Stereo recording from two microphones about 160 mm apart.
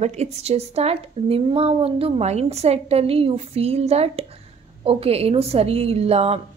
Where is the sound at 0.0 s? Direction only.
45° right (ahead or behind).